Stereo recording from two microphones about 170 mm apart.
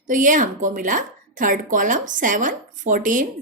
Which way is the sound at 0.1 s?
50° right (ahead or behind).